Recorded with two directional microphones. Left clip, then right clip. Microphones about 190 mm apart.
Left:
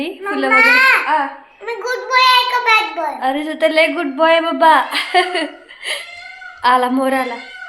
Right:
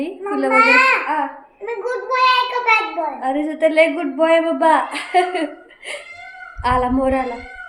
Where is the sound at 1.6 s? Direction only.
5° right (ahead or behind).